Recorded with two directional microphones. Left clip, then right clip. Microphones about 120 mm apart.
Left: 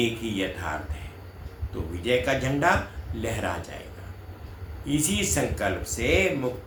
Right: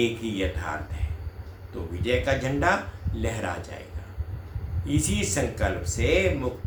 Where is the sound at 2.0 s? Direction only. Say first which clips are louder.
Left 1 dB; 20° right (ahead or behind).